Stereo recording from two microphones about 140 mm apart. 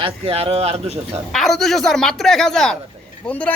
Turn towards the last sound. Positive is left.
turn(degrees=10)  # may be behind; listen again after turning